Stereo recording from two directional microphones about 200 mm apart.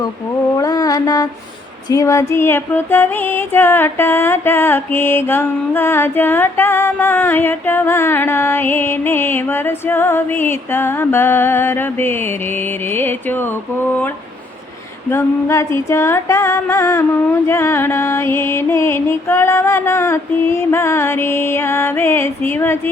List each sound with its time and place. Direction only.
0.5 s mantra: 15° left (ahead or behind)
1.9 s music: 15° left (ahead or behind)
15.1 s music: 15° left (ahead or behind)